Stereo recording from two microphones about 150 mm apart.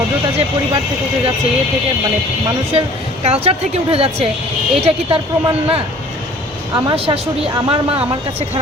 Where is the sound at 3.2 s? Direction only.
40° right (ahead or behind).